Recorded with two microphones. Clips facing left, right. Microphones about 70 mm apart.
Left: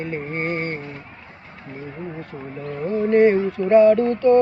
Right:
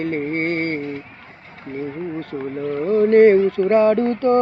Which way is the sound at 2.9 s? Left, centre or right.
Right.